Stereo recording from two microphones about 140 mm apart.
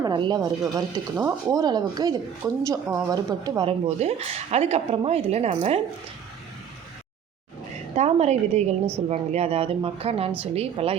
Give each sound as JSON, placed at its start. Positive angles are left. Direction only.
{"t": 0.0, "sound": "a woman's voice", "side_deg": -30}
{"t": 3.7, "sound": "a woman's voice", "side_deg": -50}
{"t": 7.9, "sound": "a woman's voice", "side_deg": -50}